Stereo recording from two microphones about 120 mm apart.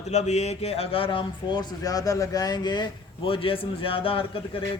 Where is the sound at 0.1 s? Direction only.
70° left (ahead or behind).